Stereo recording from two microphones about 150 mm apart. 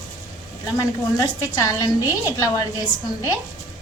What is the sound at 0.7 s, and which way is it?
A woman's voice, 25° left (ahead or behind).